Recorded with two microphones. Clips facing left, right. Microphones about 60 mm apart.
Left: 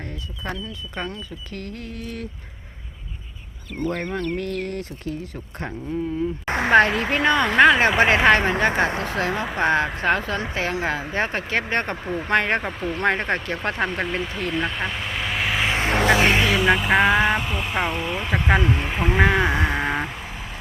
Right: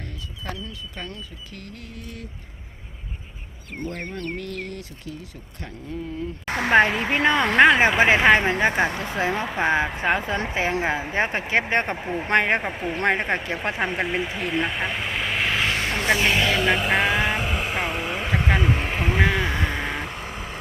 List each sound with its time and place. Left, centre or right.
0.4 s speech: left
1.5 s a sound: left
3.8 s speech: left
4.4 s speech: left
6.7 s speech: centre
9.6 s speech: centre
15.9 s music: left
16.4 s speech: centre
19.2 s vehicle: centre